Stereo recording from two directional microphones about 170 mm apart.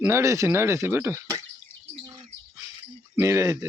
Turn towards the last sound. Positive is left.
turn(degrees=-15)  # may be behind; listen again after turning